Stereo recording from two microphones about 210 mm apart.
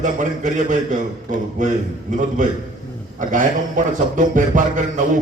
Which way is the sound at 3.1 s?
40° right (ahead or behind).